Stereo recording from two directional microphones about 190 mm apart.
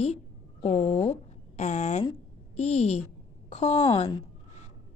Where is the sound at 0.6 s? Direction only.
20° left (ahead or behind).